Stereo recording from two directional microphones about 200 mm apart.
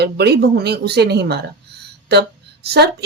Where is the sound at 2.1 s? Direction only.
55° right (ahead or behind).